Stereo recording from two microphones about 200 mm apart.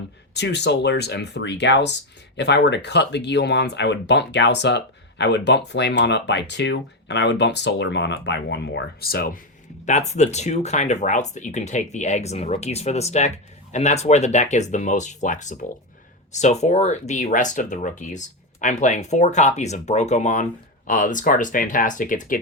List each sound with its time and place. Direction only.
0.3 s speech: 55° left (ahead or behind)
9.8 s speech: 35° left (ahead or behind)